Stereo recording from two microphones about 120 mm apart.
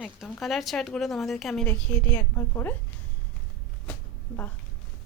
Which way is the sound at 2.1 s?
20° left (ahead or behind).